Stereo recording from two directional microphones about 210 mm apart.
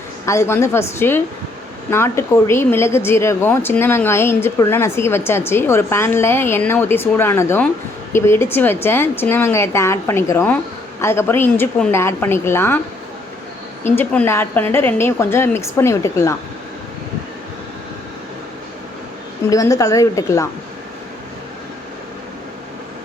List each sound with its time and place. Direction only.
0.3 s a woman's voice: 10° left (ahead or behind)
13.9 s a woman's voice: 5° left (ahead or behind)
19.5 s a woman's voice: 15° left (ahead or behind)